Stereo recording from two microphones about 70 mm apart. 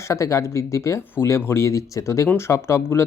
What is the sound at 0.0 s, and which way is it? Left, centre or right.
Speech, left.